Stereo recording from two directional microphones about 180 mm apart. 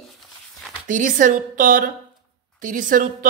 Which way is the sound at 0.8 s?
45° right (ahead or behind).